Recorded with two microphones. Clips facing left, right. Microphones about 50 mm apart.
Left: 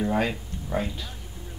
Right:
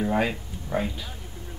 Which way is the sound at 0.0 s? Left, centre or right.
Centre.